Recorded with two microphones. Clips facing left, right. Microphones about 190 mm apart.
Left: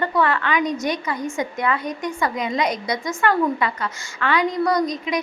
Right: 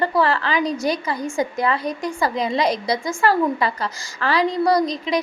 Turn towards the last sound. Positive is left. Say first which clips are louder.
# right 2 dB
turn(degrees=-30)  # may be behind; listen again after turning